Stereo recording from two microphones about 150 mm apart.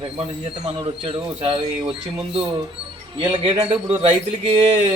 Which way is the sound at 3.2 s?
35° right (ahead or behind).